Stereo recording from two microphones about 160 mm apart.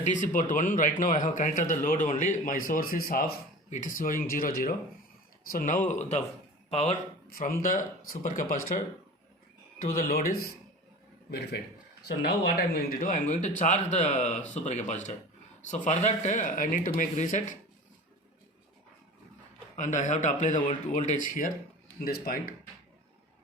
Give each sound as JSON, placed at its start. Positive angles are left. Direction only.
{"t": 0.0, "sound": "speech", "side_deg": 50}
{"t": 3.7, "sound": "speech", "side_deg": 55}
{"t": 7.3, "sound": "speech", "side_deg": 65}
{"t": 11.3, "sound": "a man's voice", "side_deg": 90}
{"t": 19.7, "sound": "speech", "side_deg": 50}